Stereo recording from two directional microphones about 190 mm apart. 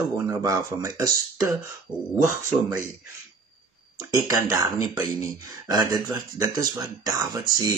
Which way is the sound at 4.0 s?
20° right (ahead or behind).